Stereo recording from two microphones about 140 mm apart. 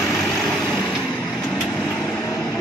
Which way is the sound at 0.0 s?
Centre (ahead or behind).